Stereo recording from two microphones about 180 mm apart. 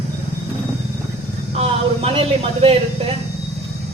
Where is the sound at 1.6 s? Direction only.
35° right (ahead or behind).